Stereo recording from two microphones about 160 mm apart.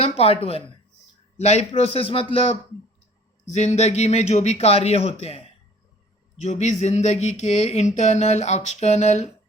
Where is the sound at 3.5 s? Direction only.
45° left (ahead or behind).